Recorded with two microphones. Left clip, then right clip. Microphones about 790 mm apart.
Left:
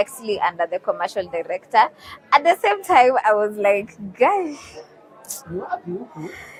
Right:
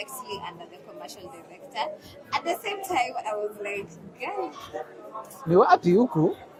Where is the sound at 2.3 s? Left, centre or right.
Left.